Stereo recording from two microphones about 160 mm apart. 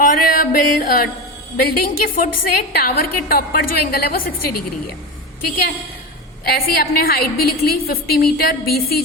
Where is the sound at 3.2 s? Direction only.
65° left (ahead or behind).